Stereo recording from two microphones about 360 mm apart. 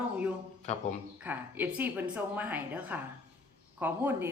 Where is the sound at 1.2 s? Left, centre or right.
Centre.